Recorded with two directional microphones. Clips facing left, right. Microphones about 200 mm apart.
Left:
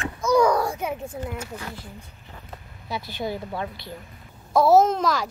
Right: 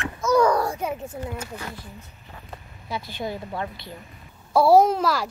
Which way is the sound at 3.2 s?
5° left (ahead or behind).